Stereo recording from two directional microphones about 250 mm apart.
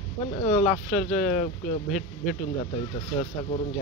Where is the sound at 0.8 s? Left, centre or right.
Left.